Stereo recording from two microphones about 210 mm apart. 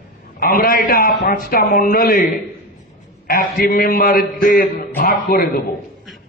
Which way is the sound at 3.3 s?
45° left (ahead or behind).